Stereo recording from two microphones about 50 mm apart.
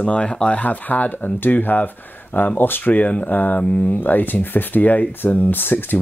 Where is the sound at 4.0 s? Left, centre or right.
Left.